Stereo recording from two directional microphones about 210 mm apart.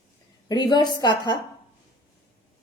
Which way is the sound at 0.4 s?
20° left (ahead or behind).